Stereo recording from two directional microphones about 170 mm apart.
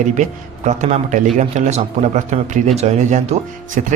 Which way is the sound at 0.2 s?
45° right (ahead or behind).